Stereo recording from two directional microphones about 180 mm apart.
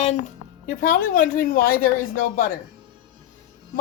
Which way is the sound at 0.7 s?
50° left (ahead or behind).